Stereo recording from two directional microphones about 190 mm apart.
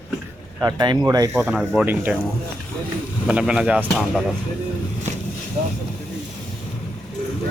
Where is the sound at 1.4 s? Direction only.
5° right (ahead or behind).